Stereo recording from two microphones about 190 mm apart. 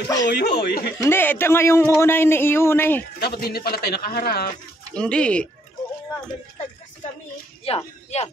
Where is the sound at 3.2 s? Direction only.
55° left (ahead or behind).